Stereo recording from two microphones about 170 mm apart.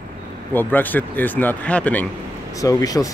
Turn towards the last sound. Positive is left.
turn(degrees=20)  # may be behind; listen again after turning